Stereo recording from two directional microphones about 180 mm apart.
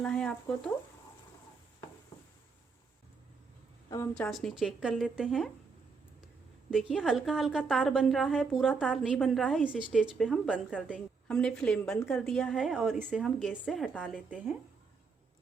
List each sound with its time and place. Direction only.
0.0 s a woman's voice: 5° left (ahead or behind)
3.8 s a woman's voice: 20° left (ahead or behind)
4.1 s a woman's voice: 5° left (ahead or behind)
6.7 s a woman's voice: centre (ahead or behind)